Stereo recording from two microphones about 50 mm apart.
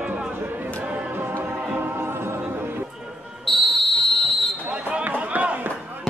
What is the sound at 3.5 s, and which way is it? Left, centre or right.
Basketball bounce, centre.